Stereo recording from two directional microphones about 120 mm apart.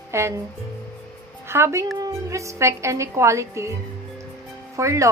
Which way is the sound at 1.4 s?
20° right (ahead or behind).